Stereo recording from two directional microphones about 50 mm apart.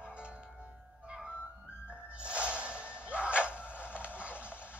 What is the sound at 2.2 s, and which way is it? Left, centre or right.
Music, right.